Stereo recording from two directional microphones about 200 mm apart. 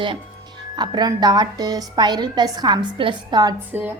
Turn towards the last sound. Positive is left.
turn(degrees=-15)  # may be behind; listen again after turning